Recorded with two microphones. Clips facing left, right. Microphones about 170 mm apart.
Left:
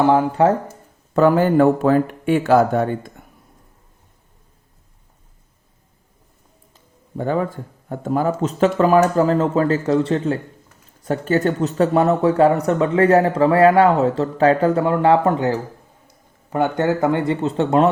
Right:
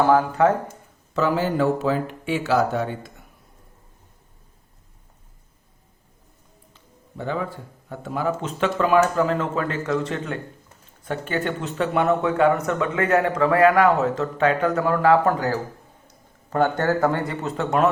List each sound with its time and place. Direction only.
0.1 s speech: 25° left (ahead or behind)
1.1 s a man's voice: 50° left (ahead or behind)
6.7 s speech: 45° left (ahead or behind); by 17.8 s 30° left (ahead or behind)